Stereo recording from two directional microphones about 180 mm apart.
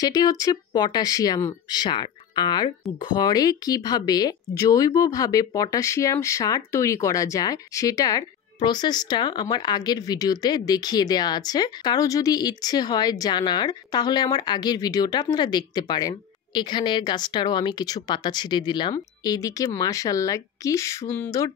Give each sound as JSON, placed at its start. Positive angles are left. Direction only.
{"t": 0.0, "sound": "speech", "side_deg": 20}